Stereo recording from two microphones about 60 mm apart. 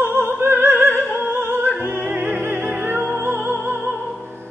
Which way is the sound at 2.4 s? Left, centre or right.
Right.